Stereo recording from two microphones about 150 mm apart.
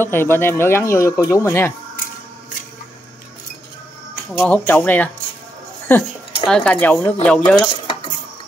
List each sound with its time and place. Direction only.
0.0 s speech: 15° left (ahead or behind)
4.4 s speech: 15° left (ahead or behind)
7.8 s dishes: 30° left (ahead or behind)